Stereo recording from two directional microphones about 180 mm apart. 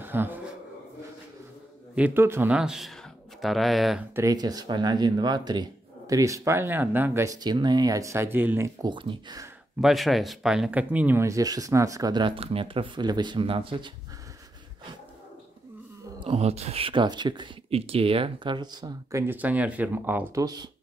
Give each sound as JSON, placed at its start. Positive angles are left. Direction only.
{"t": 0.0, "sound": "a sound", "side_deg": -10}
{"t": 2.0, "sound": "speech", "side_deg": -10}
{"t": 4.1, "sound": "speech", "side_deg": -20}
{"t": 8.9, "sound": "speech", "side_deg": -25}
{"t": 9.8, "sound": "speech", "side_deg": 0}
{"t": 16.2, "sound": "speech", "side_deg": -35}